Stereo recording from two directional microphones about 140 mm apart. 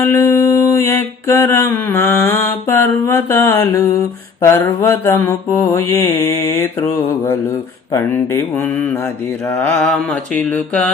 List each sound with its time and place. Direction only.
0.0 s mantra: 15° left (ahead or behind)
7.9 s mantra: 15° left (ahead or behind)